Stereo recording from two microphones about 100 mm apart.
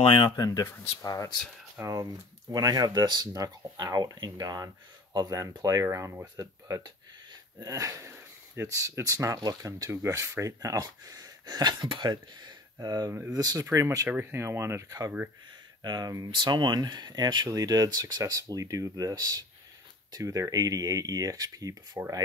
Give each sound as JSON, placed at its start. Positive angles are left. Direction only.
{"t": 0.0, "sound": "speech", "side_deg": 60}
{"t": 0.4, "sound": "speech", "side_deg": 35}
{"t": 1.8, "sound": "speech", "side_deg": -30}
{"t": 7.5, "sound": "a sound", "side_deg": -35}
{"t": 8.8, "sound": "speech", "side_deg": -35}
{"t": 13.7, "sound": "speech", "side_deg": -30}